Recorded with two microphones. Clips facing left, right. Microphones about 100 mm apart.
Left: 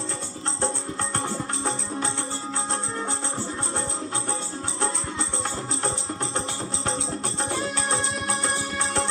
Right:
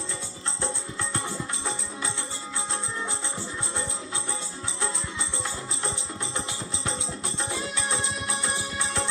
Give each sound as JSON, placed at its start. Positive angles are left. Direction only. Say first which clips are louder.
{"t": 1.2, "sound": "music", "louder": "left 4 dB", "side_deg": 50}
{"t": 6.8, "sound": "music", "louder": "left 4 dB", "side_deg": 40}